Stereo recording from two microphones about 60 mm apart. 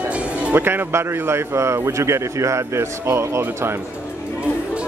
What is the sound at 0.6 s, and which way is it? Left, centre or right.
A man's voice, right.